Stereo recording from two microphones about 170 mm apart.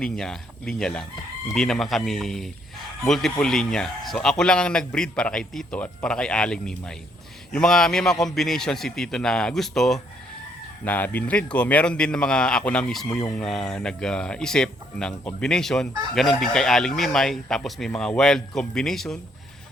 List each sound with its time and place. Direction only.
0.0 s speech: 5° left (ahead or behind)